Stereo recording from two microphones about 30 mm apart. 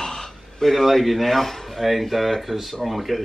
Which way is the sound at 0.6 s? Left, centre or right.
Centre.